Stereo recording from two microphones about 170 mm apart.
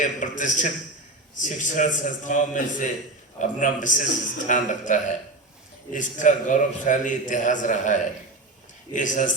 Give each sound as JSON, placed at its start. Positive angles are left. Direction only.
{"t": 0.0, "sound": "a man's voice", "side_deg": 50}